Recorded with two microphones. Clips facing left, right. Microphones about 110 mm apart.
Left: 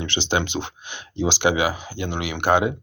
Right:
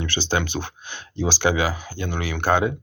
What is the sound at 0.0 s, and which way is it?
Speech, 20° left (ahead or behind).